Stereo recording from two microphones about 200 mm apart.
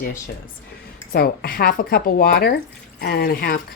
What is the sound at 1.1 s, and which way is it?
Speech, 50° left (ahead or behind).